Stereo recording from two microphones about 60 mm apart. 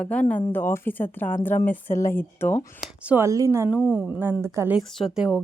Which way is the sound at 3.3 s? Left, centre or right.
Right.